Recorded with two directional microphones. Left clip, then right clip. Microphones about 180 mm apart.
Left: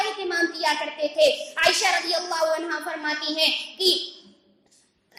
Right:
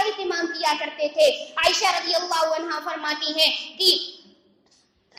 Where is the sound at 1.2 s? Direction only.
10° right (ahead or behind).